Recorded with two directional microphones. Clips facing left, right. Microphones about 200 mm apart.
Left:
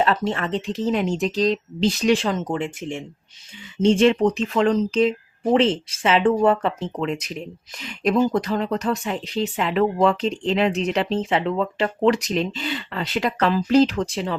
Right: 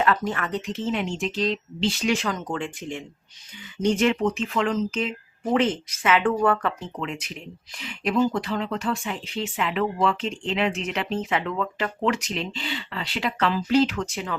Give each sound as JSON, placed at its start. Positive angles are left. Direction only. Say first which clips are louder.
{"t": 0.0, "sound": "speech", "louder": "left 2 dB", "side_deg": 25}
{"t": 7.0, "sound": "speech", "louder": "left 7 dB", "side_deg": 40}